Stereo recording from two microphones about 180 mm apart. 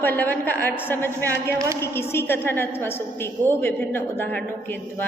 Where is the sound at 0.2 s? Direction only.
10° left (ahead or behind).